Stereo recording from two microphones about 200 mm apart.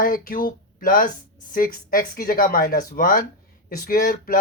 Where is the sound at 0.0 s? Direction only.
45° left (ahead or behind).